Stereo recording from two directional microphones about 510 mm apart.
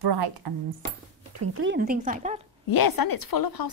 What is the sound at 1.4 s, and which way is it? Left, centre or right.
Speech, right.